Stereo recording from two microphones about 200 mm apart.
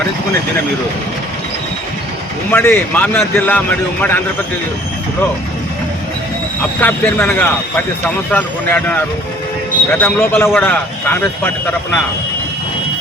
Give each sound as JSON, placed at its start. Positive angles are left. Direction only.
{"t": 2.5, "sound": "a man's voice", "side_deg": 10}
{"t": 6.7, "sound": "a man's voice", "side_deg": 10}